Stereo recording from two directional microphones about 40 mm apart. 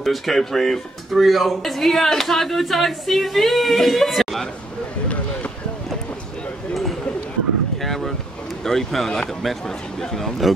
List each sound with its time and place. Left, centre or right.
0.0 s speech: centre
5.0 s a sound: left
7.8 s boat: centre
8.6 s speech: centre